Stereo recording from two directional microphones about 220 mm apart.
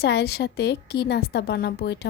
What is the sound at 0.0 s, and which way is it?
A woman's voice, 50° left (ahead or behind).